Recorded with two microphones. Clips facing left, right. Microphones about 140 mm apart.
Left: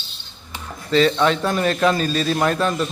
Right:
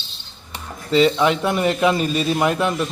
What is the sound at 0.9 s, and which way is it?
A man's voice, 15° right (ahead or behind).